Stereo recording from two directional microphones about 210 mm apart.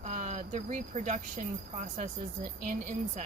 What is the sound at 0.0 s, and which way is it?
A woman's voice, 35° right (ahead or behind).